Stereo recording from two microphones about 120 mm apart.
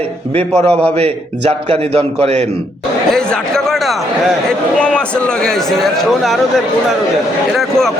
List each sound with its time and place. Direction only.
0.3 s a man's voice: 60° right (ahead or behind)
3.1 s a man's voice: 5° left (ahead or behind)
7.5 s a man's voice: centre (ahead or behind)